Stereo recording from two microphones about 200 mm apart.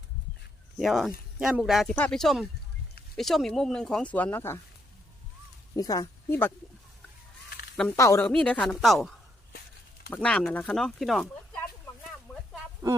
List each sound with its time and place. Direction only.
0.8 s speech: centre (ahead or behind)
5.7 s speech: 20° left (ahead or behind)
7.9 s speech: 15° left (ahead or behind)